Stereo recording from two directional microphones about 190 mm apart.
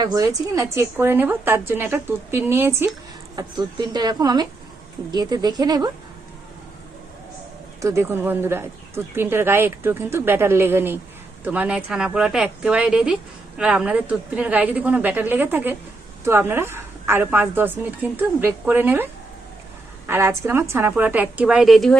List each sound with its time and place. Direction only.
0.0 s speech: 20° right (ahead or behind)
7.8 s speech: 15° right (ahead or behind)
20.1 s speech: 15° right (ahead or behind)